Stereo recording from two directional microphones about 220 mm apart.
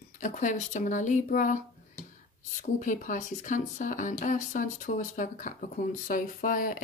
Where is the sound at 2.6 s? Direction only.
35° left (ahead or behind).